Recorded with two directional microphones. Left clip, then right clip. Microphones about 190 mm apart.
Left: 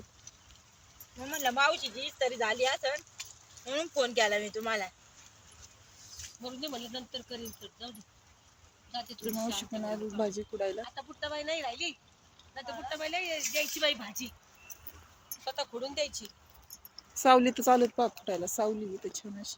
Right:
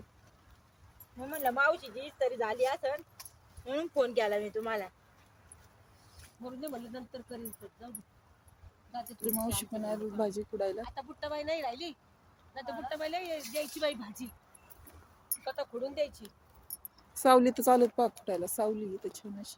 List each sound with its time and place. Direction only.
1.4 s speech: 55° right (ahead or behind)
6.4 s speech: 30° right (ahead or behind)
8.9 s speech: 30° right (ahead or behind)
9.2 s speech: centre (ahead or behind)
10.8 s speech: 5° right (ahead or behind); by 14.3 s 60° right (ahead or behind)
15.4 s speech: 60° right (ahead or behind)
17.2 s speech: 5° right (ahead or behind)
18.3 s speech: 10° left (ahead or behind)